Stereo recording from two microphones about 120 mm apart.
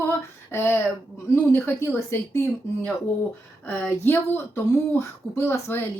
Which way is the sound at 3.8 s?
15° left (ahead or behind).